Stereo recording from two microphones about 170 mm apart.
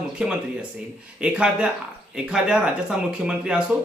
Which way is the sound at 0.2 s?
5° right (ahead or behind).